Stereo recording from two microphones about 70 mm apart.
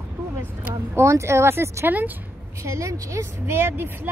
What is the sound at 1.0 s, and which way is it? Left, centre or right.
Speech, right.